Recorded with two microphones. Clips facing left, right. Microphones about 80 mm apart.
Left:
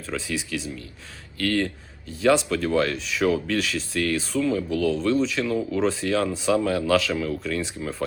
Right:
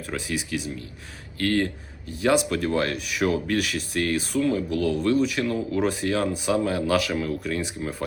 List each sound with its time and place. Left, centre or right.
0.1 s speech: centre